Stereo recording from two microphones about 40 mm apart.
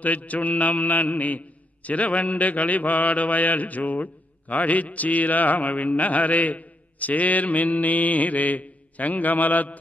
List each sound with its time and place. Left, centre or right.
0.0 s a man's voice: left